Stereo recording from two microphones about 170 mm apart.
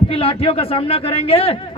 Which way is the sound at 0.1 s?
35° left (ahead or behind).